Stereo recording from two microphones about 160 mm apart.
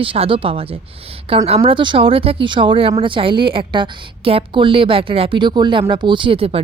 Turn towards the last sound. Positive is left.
turn(degrees=-35)  # may be behind; listen again after turning